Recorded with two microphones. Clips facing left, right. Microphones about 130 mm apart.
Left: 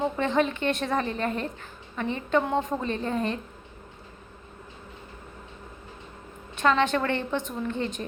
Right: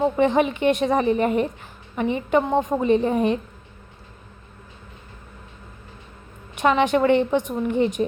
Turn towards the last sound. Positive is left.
turn(degrees=-15)  # may be behind; listen again after turning